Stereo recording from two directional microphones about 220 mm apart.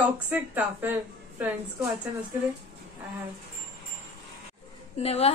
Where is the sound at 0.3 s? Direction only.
10° right (ahead or behind).